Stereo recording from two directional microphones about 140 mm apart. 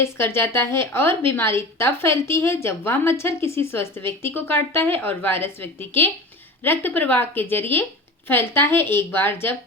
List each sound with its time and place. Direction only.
0.0 s a woman's voice: 20° left (ahead or behind)